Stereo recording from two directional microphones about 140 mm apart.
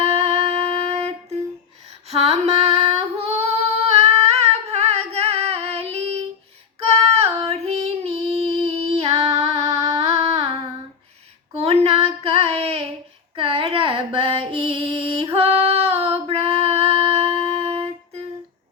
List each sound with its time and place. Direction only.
0.0 s music: 45° right (ahead or behind)
2.0 s female singing: 45° right (ahead or behind)
3.8 s singing: 45° right (ahead or behind)
6.8 s female singing: 45° right (ahead or behind)
11.6 s child singing: 45° right (ahead or behind)
13.3 s a sound: 40° right (ahead or behind)